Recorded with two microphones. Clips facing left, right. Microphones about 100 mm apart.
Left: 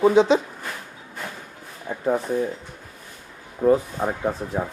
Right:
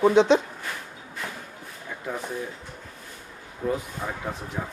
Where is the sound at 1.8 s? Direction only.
35° left (ahead or behind).